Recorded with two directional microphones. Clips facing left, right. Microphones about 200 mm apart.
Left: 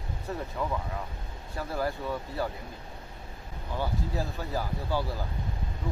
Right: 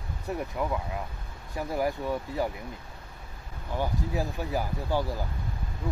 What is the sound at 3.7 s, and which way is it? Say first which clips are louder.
Speech: right 2 dB; 15° right (ahead or behind).